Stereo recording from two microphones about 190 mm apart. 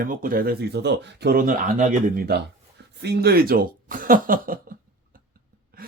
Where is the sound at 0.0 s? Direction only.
45° right (ahead or behind).